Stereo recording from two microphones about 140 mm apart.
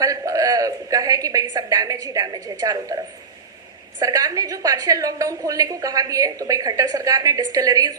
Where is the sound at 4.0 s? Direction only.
25° right (ahead or behind).